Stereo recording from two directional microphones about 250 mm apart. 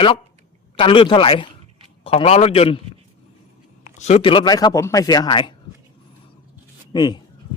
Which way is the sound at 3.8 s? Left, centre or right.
Left.